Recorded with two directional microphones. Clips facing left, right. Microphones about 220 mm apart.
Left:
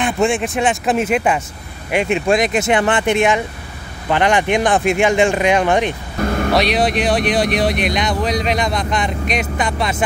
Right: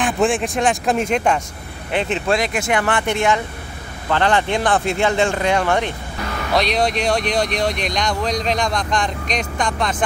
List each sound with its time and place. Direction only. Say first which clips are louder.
0.0 s speech: left 1 dB; centre (ahead or behind); by 5.9 s 15° left (ahead or behind)
6.2 s vehicle: left 10 dB; 50° left (ahead or behind)
6.5 s speech: even; 5° left (ahead or behind)